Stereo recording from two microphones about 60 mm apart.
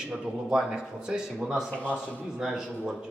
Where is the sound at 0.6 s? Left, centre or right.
Centre.